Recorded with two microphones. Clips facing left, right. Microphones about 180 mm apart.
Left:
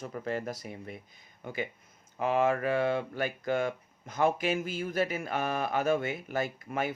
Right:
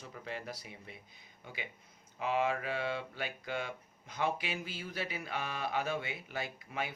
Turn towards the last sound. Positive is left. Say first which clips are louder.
# left 7 dB
turn(degrees=45)  # may be behind; listen again after turning